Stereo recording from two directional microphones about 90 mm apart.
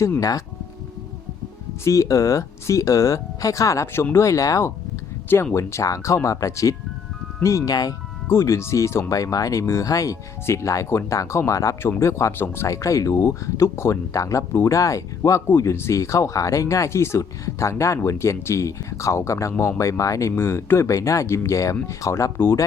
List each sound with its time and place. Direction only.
0.2 s speech: 40° left (ahead or behind)
1.8 s speech: 35° left (ahead or behind)
8.3 s speech: 30° left (ahead or behind)